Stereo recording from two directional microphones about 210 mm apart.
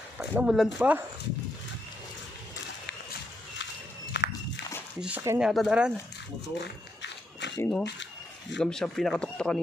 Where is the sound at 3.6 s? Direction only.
55° left (ahead or behind).